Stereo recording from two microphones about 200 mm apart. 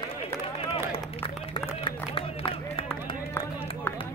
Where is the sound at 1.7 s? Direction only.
25° left (ahead or behind).